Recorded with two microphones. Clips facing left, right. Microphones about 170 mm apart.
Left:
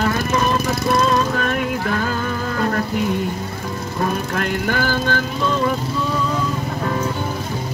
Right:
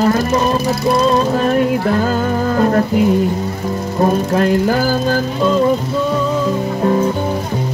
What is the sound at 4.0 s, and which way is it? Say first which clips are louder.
Music: right 8 dB; 30° right (ahead or behind).